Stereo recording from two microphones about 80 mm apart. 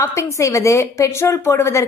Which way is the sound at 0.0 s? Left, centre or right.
Left.